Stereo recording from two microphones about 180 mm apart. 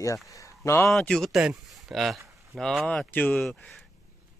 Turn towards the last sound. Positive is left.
turn(degrees=5)  # may be behind; listen again after turning